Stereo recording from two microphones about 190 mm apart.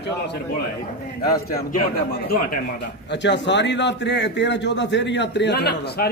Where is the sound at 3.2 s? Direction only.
65° left (ahead or behind).